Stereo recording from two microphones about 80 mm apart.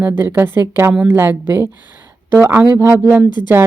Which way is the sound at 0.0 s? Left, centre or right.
Right.